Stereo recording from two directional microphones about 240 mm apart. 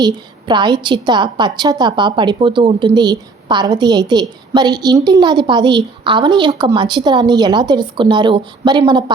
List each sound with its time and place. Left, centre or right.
0.0 s a woman's voice: centre